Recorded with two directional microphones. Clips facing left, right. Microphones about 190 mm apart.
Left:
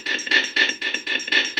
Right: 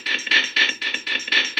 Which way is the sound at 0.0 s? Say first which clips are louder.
Left 3 dB; 50° left (ahead or behind).